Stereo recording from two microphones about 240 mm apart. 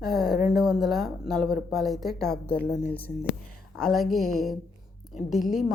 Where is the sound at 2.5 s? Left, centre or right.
Left.